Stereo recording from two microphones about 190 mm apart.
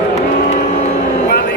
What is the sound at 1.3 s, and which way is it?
Vehicle, 55° left (ahead or behind).